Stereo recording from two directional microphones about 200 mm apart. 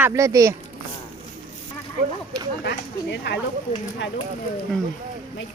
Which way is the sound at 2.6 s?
60° left (ahead or behind).